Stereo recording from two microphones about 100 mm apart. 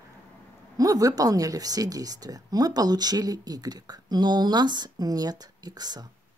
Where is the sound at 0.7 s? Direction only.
35° right (ahead or behind).